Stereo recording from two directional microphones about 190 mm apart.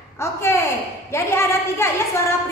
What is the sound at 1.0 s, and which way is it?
A woman's voice, 15° left (ahead or behind).